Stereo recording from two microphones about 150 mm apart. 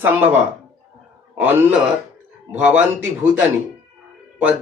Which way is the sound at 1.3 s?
10° right (ahead or behind).